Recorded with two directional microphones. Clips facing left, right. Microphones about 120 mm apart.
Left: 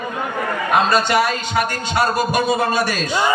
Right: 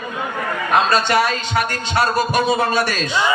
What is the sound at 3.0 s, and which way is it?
Speech, 45° left (ahead or behind).